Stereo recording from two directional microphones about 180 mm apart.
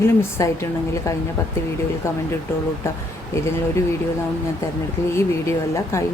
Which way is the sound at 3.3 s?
15° left (ahead or behind).